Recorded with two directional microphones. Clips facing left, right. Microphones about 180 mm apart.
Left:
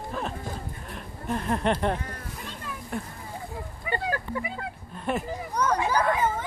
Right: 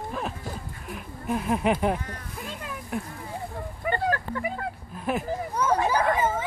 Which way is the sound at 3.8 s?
55° right (ahead or behind).